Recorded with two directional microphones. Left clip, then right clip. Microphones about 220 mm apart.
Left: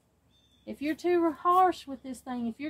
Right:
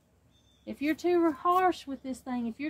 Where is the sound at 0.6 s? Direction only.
15° right (ahead or behind).